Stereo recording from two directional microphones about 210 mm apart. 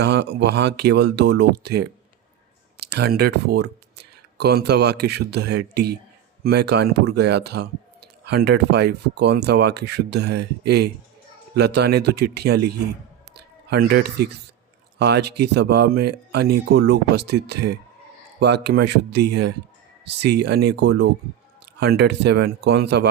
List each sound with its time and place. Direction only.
0.0 s speech: 55° right (ahead or behind)